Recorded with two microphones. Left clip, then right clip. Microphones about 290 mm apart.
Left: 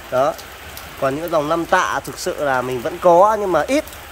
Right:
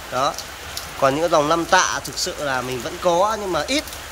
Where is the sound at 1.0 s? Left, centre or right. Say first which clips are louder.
Right 2 dB; centre.